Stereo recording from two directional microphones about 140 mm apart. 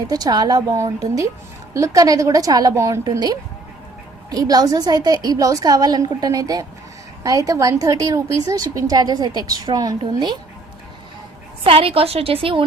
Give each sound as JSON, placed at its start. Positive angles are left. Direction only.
{"t": 0.1, "sound": "a woman's voice", "side_deg": -30}
{"t": 11.6, "sound": "a woman's voice", "side_deg": -40}